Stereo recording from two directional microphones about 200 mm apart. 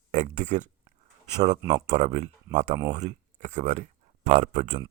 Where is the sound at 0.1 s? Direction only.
35° right (ahead or behind).